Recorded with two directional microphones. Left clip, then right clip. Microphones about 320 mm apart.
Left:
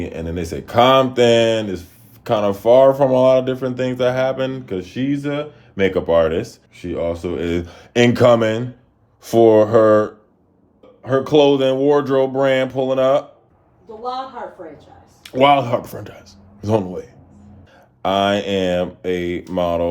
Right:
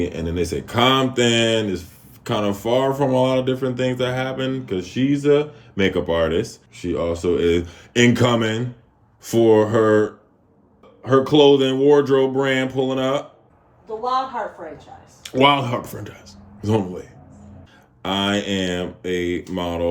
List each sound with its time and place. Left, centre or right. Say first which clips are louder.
0.0 s speech: right 2 dB; centre
15.2 s speech: left 3 dB; centre